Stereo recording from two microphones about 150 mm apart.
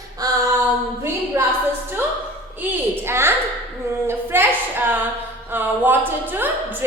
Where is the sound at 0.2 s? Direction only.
25° right (ahead or behind).